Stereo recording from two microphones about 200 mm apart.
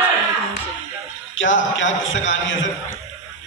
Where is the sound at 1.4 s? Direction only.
70° left (ahead or behind).